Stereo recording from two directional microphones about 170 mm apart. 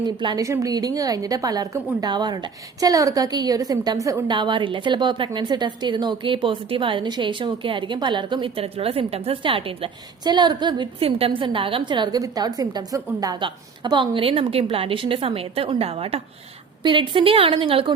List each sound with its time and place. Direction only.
0.0 s a woman's voice: 25° right (ahead or behind)